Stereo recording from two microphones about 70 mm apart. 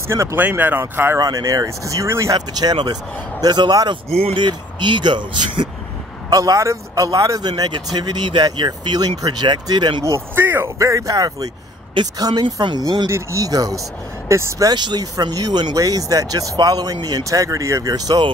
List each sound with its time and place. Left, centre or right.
0.1 s speech: right
0.4 s speech: right
1.2 s speech: right
2.0 s speech: right
2.3 s speech: right
6.3 s speech: right
10.3 s speech: right
10.8 s speech: right
12.2 s speech: right
13.1 s speech: right
13.5 s speech: right
14.3 s speech: right
14.7 s speech: right
17.9 s speech: right